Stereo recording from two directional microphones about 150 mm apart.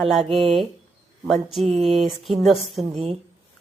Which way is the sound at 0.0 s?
Centre (ahead or behind).